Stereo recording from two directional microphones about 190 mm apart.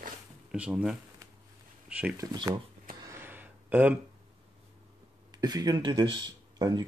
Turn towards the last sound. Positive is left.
turn(degrees=-20)  # may be behind; listen again after turning